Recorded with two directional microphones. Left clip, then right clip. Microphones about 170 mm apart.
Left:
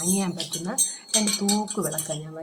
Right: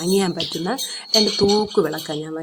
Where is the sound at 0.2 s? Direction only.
55° right (ahead or behind).